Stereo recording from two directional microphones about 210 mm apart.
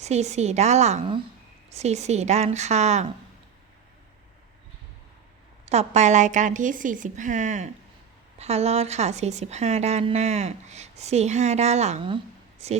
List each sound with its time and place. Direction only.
0.0 s a woman's voice: 30° right (ahead or behind)
5.6 s a woman's voice: 30° right (ahead or behind)